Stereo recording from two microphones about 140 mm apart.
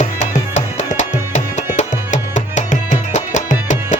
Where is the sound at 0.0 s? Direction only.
60° left (ahead or behind).